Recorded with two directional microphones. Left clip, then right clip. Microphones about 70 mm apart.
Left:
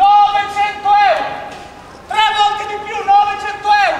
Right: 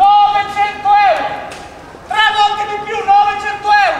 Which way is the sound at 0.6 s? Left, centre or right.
Centre.